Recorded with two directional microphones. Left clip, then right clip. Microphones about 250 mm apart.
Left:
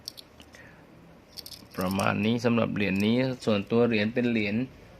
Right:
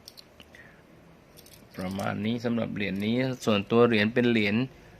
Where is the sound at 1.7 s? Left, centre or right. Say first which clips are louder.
Left 5 dB; centre.